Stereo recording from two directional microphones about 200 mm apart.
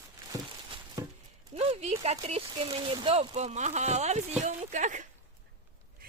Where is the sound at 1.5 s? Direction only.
30° right (ahead or behind).